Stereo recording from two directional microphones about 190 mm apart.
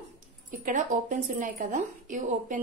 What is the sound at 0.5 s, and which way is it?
A woman's voice, 45° right (ahead or behind).